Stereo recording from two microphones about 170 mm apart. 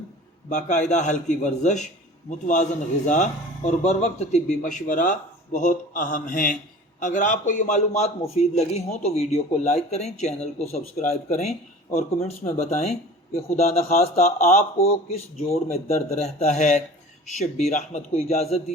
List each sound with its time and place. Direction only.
0.5 s speech: 45° left (ahead or behind)
3.1 s a man's voice: 45° left (ahead or behind)